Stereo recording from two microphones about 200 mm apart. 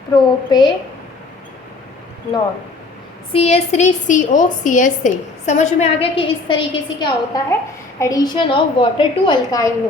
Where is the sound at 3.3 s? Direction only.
30° left (ahead or behind).